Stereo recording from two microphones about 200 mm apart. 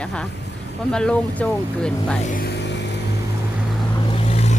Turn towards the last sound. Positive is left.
turn(degrees=30)  # may be behind; listen again after turning